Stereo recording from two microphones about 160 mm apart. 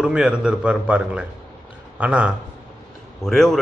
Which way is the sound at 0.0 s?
5° right (ahead or behind).